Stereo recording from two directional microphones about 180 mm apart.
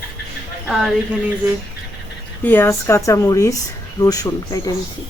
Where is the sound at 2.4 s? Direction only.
10° left (ahead or behind).